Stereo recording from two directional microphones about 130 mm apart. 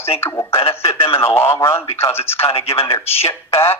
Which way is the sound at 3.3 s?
20° left (ahead or behind).